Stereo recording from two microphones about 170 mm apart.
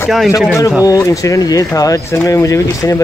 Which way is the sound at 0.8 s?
20° left (ahead or behind).